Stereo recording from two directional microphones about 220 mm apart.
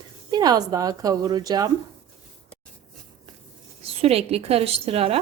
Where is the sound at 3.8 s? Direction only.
25° right (ahead or behind).